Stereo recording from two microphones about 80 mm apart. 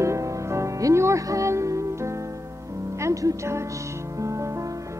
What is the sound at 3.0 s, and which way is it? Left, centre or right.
Music, right.